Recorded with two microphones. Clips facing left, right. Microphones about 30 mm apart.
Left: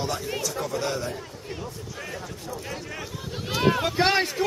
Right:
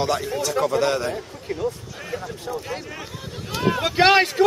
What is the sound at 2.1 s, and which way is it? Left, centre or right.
Speech, right.